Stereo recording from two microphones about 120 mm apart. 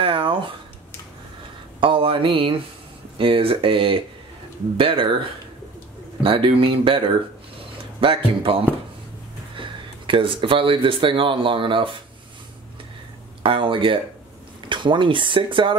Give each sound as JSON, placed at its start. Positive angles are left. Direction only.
{"t": 0.0, "sound": "a sound", "side_deg": -45}
{"t": 1.8, "sound": "speech", "side_deg": -45}
{"t": 6.2, "sound": "speech", "side_deg": -50}
{"t": 8.0, "sound": "speech", "side_deg": -45}
{"t": 13.4, "sound": "speech", "side_deg": -45}